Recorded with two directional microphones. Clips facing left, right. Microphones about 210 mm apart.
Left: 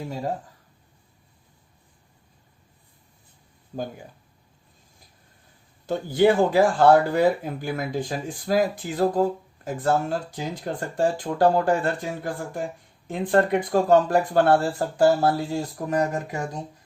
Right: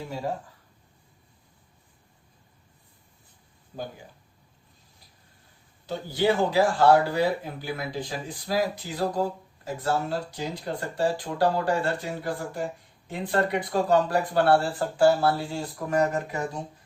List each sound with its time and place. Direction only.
5.8 s speech: 50° left (ahead or behind)